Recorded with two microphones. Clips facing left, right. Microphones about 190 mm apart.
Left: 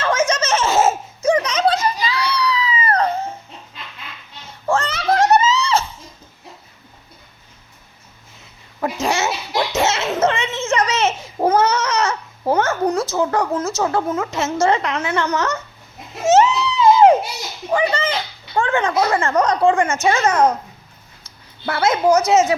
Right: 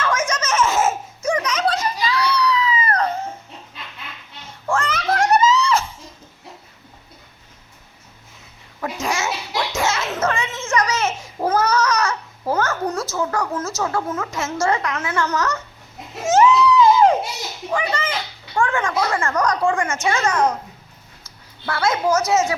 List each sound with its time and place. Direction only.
0.0 s laughter: 25° left (ahead or behind)
4.7 s music: 30° left (ahead or behind)
8.8 s babbling: 30° left (ahead or behind)
9.7 s a sound: 25° left (ahead or behind)
11.4 s goat: 25° left (ahead or behind)
13.1 s a sound: 25° left (ahead or behind)
14.1 s speech: 20° left (ahead or behind)
16.2 s a sound: 25° left (ahead or behind)
21.7 s speech: 20° left (ahead or behind)